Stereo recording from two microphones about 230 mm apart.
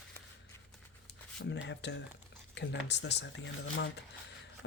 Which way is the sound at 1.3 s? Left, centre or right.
Left.